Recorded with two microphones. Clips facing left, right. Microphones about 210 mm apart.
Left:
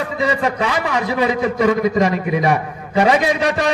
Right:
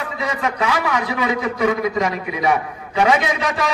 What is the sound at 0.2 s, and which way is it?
A man's voice, 35° left (ahead or behind).